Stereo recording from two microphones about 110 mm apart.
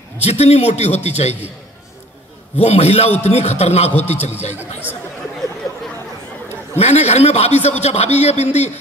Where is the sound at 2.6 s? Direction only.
70° left (ahead or behind).